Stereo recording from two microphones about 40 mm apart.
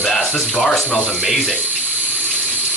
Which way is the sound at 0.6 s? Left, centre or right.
Centre.